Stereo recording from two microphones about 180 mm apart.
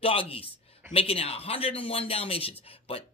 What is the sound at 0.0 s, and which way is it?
Speech, 30° left (ahead or behind).